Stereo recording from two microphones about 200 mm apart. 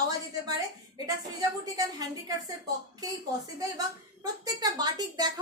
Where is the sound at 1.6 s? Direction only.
20° right (ahead or behind).